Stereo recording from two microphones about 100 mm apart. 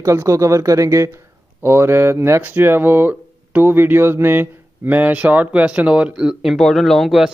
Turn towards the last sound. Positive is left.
turn(degrees=-5)  # may be behind; listen again after turning